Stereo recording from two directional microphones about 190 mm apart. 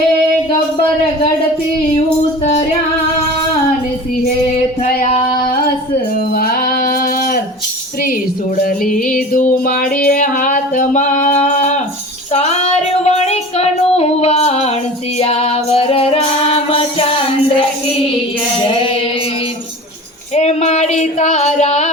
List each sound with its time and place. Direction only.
2.0 s music: 35° left (ahead or behind)
4.8 s female singing: 40° left (ahead or behind)
6.3 s a sound: 50° left (ahead or behind)
8.5 s music: 50° left (ahead or behind)
12.3 s female singing: 35° left (ahead or behind)
15.2 s music: 30° left (ahead or behind)
20.3 s female singing: 35° left (ahead or behind)